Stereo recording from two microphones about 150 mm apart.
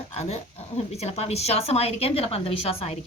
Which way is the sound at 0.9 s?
45° left (ahead or behind).